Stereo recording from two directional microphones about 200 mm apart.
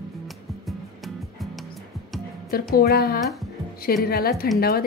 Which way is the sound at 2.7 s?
50° left (ahead or behind).